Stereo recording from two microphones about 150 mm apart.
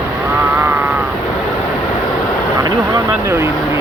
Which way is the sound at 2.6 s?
30° right (ahead or behind).